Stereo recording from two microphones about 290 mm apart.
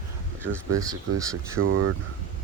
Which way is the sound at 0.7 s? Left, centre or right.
Centre.